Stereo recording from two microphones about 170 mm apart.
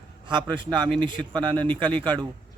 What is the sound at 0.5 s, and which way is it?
Speech, 25° right (ahead or behind).